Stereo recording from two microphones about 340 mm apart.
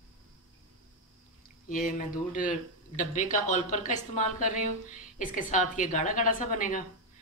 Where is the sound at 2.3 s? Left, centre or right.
Left.